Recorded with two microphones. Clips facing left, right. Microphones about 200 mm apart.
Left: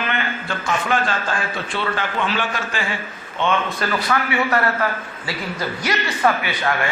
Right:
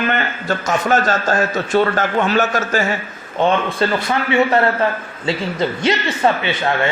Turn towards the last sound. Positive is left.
turn(degrees=-25)  # may be behind; listen again after turning